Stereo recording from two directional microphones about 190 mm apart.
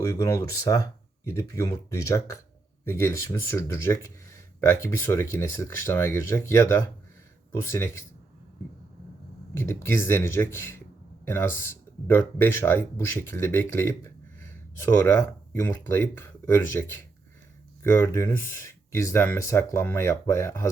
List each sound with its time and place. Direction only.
0.0 s speech: 15° left (ahead or behind)
9.6 s speech: 15° left (ahead or behind)